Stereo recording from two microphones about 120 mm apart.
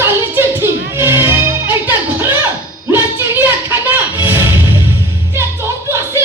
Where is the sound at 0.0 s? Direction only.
20° right (ahead or behind).